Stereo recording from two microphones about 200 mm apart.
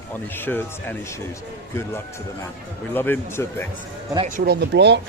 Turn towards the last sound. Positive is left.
turn(degrees=-60)  # may be behind; listen again after turning